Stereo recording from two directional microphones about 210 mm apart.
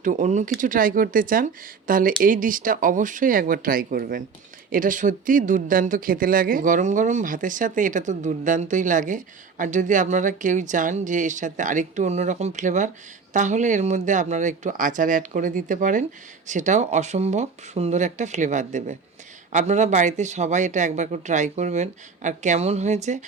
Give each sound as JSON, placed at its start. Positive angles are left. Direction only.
{"t": 0.0, "sound": "speech", "side_deg": -35}